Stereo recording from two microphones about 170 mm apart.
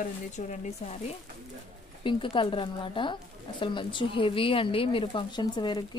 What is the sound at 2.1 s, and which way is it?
A woman's voice, 30° left (ahead or behind).